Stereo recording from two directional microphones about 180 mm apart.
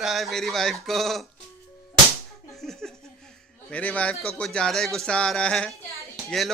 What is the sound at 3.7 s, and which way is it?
Speech, 5° left (ahead or behind).